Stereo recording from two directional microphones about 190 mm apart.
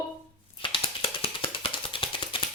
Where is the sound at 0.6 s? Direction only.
25° left (ahead or behind).